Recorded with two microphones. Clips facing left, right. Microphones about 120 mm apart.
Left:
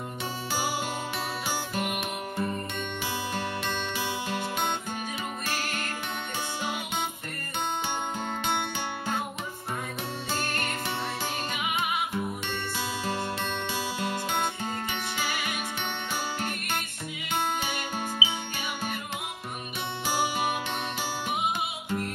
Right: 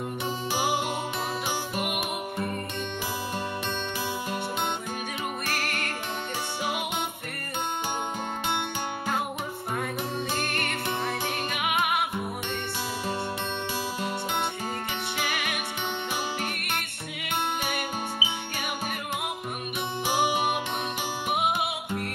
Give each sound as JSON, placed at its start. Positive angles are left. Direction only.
{"t": 1.8, "sound": "music", "side_deg": -5}
{"t": 11.5, "sound": "music", "side_deg": -60}
{"t": 18.2, "sound": "music", "side_deg": -40}
{"t": 20.2, "sound": "music", "side_deg": -10}
{"t": 21.3, "sound": "music", "side_deg": -60}